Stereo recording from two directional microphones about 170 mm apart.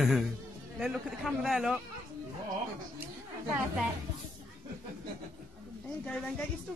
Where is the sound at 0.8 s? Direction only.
Centre (ahead or behind).